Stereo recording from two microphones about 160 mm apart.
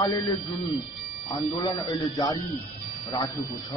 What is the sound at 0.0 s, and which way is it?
Speech, 25° left (ahead or behind).